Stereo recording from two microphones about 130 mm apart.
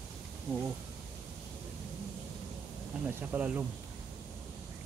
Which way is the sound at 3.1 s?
15° right (ahead or behind).